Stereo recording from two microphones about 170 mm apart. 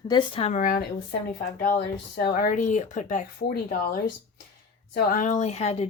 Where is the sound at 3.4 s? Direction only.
65° left (ahead or behind); by 5.9 s 40° left (ahead or behind).